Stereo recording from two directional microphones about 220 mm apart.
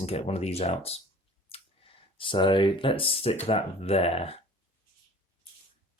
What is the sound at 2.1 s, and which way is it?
Speech, 20° left (ahead or behind).